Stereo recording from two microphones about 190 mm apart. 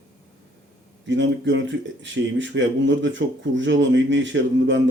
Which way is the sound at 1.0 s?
75° right (ahead or behind).